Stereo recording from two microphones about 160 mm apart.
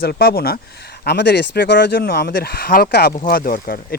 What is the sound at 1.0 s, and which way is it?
Speech, 90° left.